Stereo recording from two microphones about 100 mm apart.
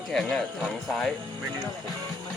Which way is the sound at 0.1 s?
5° left (ahead or behind).